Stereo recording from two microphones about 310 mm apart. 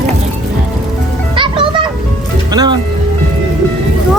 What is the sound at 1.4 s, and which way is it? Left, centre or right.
Music, centre.